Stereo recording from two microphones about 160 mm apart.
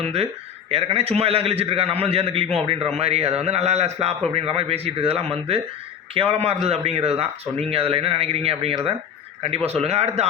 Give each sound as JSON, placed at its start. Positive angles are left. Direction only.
{"t": 0.0, "sound": "speech", "side_deg": -40}